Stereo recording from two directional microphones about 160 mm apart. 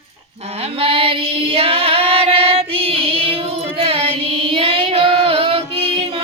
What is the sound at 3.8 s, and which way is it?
Carnatic music, 35° right (ahead or behind).